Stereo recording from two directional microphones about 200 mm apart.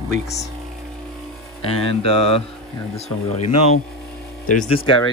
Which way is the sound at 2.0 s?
30° left (ahead or behind).